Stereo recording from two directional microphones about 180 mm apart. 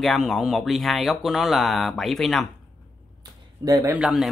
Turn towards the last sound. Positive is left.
turn(degrees=0)  # may be behind; listen again after turning